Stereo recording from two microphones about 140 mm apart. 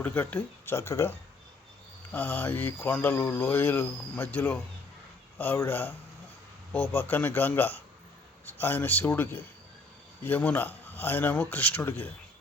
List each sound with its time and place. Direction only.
0.0 s speech: 10° left (ahead or behind)
2.1 s speech: 15° left (ahead or behind)